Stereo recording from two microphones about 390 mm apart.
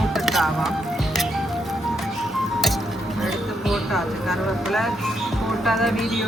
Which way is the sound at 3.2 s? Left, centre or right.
Centre.